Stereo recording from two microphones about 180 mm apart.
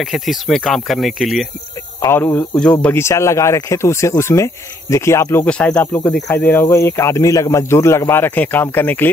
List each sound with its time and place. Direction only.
0.0 s speech: centre (ahead or behind)
2.0 s speech: 15° left (ahead or behind)